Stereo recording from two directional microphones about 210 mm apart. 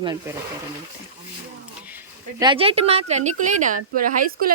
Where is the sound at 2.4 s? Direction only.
25° right (ahead or behind).